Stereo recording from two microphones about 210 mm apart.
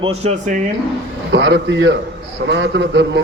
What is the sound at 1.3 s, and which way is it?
A man's voice, 55° right (ahead or behind).